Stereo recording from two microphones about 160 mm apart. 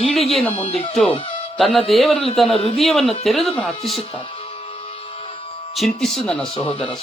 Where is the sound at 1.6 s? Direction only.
Centre (ahead or behind).